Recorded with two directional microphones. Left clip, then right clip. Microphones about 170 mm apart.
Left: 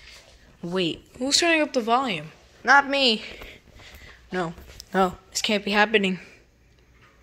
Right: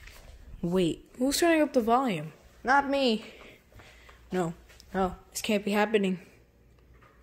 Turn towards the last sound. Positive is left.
turn(degrees=0)  # may be behind; listen again after turning